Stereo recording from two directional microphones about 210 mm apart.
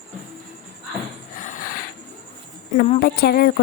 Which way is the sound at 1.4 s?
40° left (ahead or behind).